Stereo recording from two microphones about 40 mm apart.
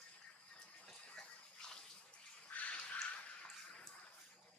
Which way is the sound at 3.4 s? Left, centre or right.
Centre.